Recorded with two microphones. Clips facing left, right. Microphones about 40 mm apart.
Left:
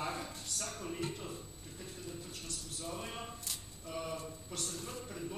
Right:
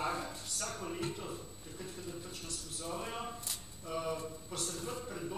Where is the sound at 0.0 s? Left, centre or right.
Centre.